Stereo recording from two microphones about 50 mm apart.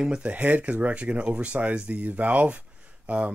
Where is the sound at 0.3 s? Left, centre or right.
Right.